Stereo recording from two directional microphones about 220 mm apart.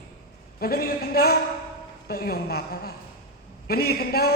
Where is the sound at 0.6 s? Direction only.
45° left (ahead or behind).